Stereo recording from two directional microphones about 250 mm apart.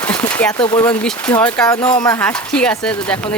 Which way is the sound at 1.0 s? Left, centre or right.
Centre.